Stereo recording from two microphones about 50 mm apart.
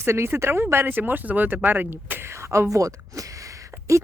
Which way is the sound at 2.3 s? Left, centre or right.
Right.